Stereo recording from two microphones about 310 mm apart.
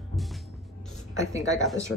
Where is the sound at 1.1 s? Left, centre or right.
Centre.